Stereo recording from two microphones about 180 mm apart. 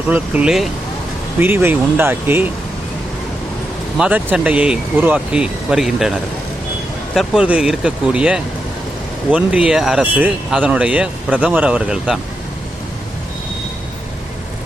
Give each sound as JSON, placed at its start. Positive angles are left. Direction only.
{"t": 0.1, "sound": "speech", "side_deg": -5}
{"t": 3.9, "sound": "speech", "side_deg": -5}